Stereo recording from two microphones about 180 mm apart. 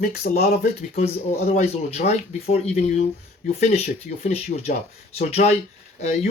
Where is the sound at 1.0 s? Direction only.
35° left (ahead or behind).